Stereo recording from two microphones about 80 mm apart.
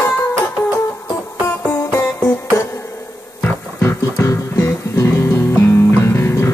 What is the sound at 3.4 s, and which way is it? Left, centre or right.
Music, left.